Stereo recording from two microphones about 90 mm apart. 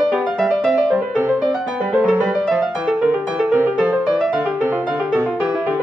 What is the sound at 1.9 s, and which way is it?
Music, 15° right (ahead or behind).